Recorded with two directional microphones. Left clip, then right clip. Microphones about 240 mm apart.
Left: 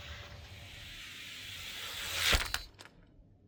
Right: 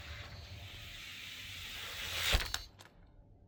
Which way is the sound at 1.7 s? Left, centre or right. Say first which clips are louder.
Left 2 dB; centre.